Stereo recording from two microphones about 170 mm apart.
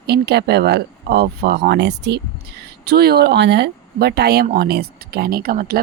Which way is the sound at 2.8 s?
70° right (ahead or behind).